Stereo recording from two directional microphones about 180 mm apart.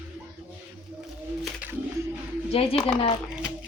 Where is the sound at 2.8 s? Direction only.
30° left (ahead or behind).